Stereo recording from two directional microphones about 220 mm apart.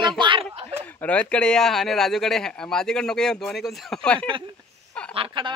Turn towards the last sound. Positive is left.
turn(degrees=-20)  # may be behind; listen again after turning